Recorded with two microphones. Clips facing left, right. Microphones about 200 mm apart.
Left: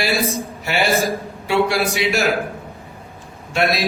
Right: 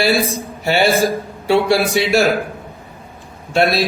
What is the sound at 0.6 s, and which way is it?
A man's voice, 30° right (ahead or behind).